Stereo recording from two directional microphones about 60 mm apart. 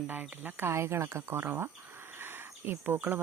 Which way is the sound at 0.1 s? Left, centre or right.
Right.